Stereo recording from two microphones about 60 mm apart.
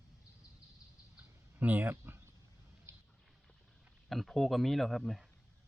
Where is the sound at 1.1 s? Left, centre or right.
Right.